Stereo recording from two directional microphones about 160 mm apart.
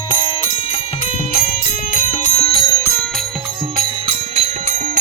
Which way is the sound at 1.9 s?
50° left (ahead or behind).